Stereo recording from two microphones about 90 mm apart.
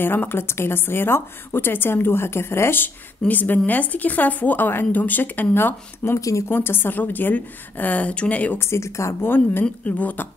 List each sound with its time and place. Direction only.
0.0 s a woman's voice: 25° left (ahead or behind)
8.5 s a woman's voice: 30° left (ahead or behind)